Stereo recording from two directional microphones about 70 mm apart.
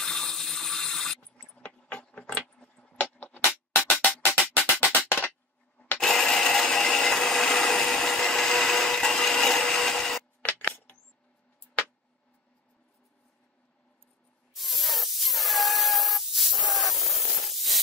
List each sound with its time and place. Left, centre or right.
0.0 s ratchet: centre
1.7 s keys jangling: centre
2.6 s music: centre
4.9 s a sound: left
5.9 s a sound: centre
7.1 s wood: centre
10.6 s coin: left
14.5 s spray: centre